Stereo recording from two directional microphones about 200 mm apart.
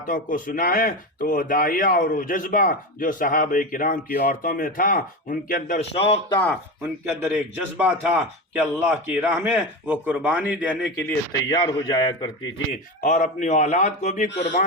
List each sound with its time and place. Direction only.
0.1 s a man's voice: 40° left (ahead or behind)
6.0 s a man's voice: 30° left (ahead or behind)
7.1 s a man's voice: 5° right (ahead or behind)
11.5 s a man's voice: 25° left (ahead or behind)
13.0 s speech: 40° left (ahead or behind)